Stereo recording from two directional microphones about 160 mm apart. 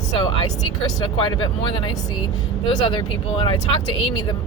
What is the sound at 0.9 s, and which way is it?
Speech, 25° left (ahead or behind).